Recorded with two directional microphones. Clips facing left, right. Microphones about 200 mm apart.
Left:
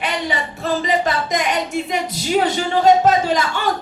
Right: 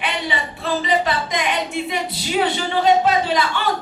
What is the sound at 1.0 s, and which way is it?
Speech, 45° left (ahead or behind).